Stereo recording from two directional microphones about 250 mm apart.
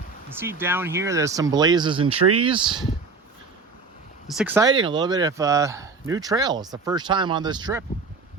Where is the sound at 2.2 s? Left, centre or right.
Right.